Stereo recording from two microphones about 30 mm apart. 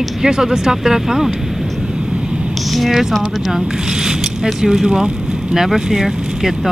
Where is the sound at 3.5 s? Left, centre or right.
Right.